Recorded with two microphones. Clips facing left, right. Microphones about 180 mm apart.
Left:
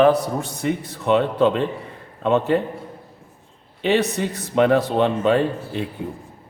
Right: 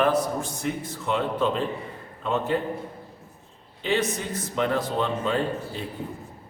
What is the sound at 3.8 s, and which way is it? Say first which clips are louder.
Speech: left 6 dB; 70° left (ahead or behind).